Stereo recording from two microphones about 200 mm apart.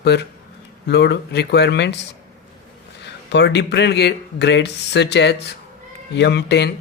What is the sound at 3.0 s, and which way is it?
Speech, 60° left (ahead or behind).